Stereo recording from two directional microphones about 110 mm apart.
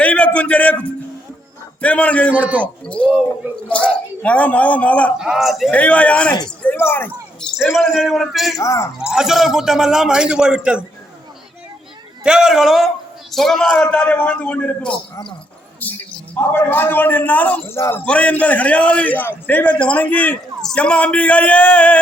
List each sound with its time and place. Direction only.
0.0 s music: 10° left (ahead or behind)
1.8 s a man's voice: 10° left (ahead or behind)
3.7 s a man's voice: 10° left (ahead or behind)
5.1 s a man's voice: 5° right (ahead or behind)
5.7 s a man's voice: 10° left (ahead or behind)
7.5 s a man's voice: centre (ahead or behind)
8.5 s speech: 30° left (ahead or behind)
9.0 s a man's voice: 5° right (ahead or behind)
12.2 s a man's voice: 5° right (ahead or behind); by 18.0 s 25° left (ahead or behind)
18.0 s a man's voice: 10° left (ahead or behind)